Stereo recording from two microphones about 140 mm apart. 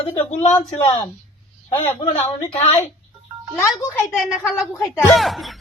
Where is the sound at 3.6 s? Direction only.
20° left (ahead or behind).